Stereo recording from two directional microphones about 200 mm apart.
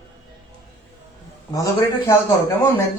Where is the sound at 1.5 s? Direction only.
15° left (ahead or behind).